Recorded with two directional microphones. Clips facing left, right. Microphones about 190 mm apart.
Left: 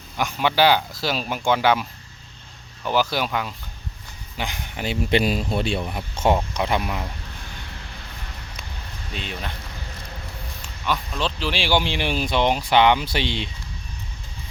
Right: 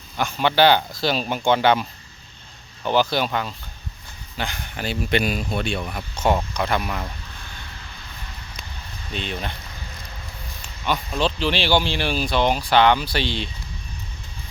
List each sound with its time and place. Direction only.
0.2 s speech: 10° left (ahead or behind)
2.9 s speech: 5° left (ahead or behind)
5.1 s speech: 30° left (ahead or behind)
9.1 s speech: 5° left (ahead or behind)
10.6 s speech: centre (ahead or behind); by 13.5 s 20° left (ahead or behind)